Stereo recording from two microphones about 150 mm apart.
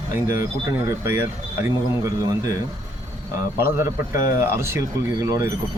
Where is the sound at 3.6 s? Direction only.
20° right (ahead or behind).